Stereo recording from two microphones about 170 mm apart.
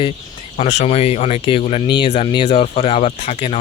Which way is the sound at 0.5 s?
45° left (ahead or behind).